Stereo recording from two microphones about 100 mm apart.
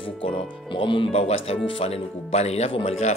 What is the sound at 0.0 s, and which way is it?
Speech, 55° left (ahead or behind).